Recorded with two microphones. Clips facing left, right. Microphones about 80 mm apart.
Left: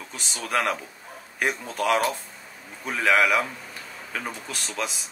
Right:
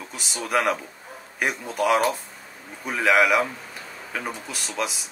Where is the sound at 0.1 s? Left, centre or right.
Centre.